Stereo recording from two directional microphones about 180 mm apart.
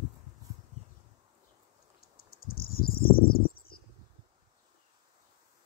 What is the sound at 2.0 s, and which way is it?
Cricket, 55° left (ahead or behind).